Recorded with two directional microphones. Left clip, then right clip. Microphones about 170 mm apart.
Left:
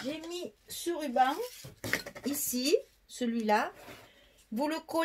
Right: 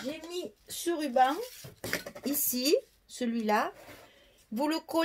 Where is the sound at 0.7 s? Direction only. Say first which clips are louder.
Right 2 dB; 55° right (ahead or behind).